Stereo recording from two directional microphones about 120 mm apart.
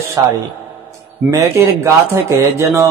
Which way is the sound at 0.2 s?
25° right (ahead or behind).